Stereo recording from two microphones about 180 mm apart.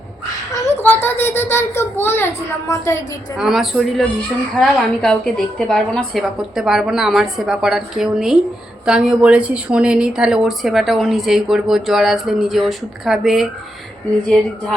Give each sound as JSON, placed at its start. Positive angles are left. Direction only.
{"t": 0.5, "sound": "a child's voice", "side_deg": 15}
{"t": 3.3, "sound": "a woman's voice", "side_deg": 0}